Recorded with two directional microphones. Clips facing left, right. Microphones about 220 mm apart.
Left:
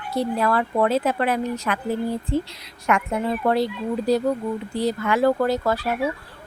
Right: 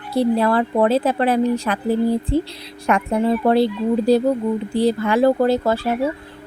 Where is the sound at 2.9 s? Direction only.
35° right (ahead or behind).